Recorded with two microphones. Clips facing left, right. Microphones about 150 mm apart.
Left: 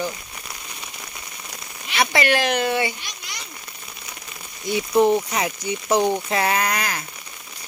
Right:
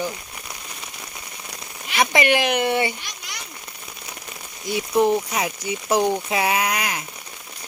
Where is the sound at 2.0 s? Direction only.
15° right (ahead or behind).